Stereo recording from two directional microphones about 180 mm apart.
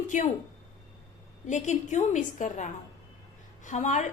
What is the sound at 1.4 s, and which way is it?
A woman's voice, 40° left (ahead or behind).